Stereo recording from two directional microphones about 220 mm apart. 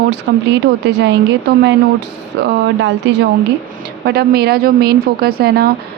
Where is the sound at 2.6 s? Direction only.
55° right (ahead or behind).